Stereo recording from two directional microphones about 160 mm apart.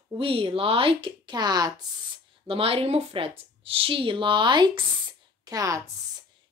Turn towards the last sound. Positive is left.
turn(degrees=-20)  # may be behind; listen again after turning